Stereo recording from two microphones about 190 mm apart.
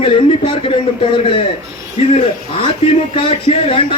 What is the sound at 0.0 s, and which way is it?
A man's voice, 25° left (ahead or behind).